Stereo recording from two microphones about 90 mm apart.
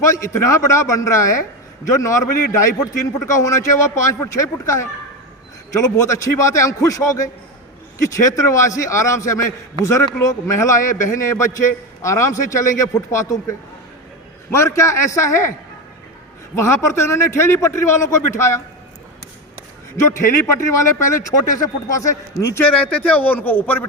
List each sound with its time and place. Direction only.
0.0 s a man's voice: 35° left (ahead or behind)
6.0 s a man's voice: 35° left (ahead or behind)
16.6 s a man's voice: 30° left (ahead or behind)
20.7 s a man's voice: 35° left (ahead or behind)
22.6 s a man's voice: 15° left (ahead or behind)